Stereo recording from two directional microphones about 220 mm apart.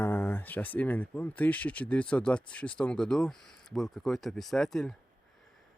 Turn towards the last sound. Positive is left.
turn(degrees=0)  # may be behind; listen again after turning